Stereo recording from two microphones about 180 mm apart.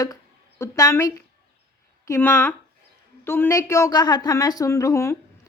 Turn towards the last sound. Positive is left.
turn(degrees=15)  # may be behind; listen again after turning